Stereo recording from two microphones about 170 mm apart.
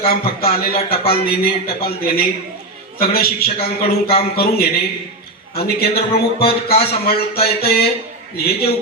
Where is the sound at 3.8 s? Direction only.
35° left (ahead or behind).